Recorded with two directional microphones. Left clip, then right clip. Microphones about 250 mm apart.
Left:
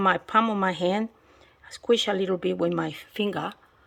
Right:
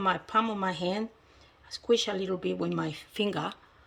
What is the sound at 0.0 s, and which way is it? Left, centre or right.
Speech, centre.